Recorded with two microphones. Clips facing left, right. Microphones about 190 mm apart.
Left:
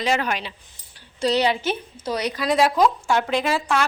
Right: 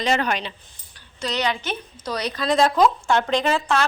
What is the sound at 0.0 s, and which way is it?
Speech, 5° left (ahead or behind).